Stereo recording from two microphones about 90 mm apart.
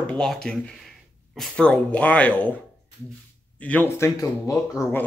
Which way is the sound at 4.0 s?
35° left (ahead or behind).